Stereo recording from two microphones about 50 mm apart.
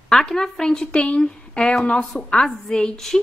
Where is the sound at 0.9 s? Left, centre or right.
Left.